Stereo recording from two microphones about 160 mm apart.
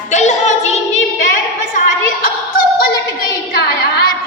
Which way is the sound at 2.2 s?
65° left (ahead or behind).